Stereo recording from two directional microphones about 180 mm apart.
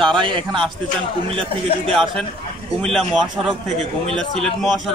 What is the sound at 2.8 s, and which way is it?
Speech, 5° left (ahead or behind).